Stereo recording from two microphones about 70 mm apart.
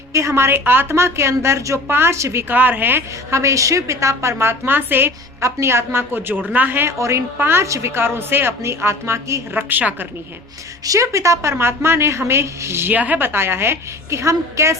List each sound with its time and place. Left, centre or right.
0.1 s a woman's voice: right
2.5 s speech: right
3.3 s a woman's voice: right
5.4 s a woman's voice: right
9.6 s speech: right
10.8 s a woman's voice: right
12.9 s a woman's voice: right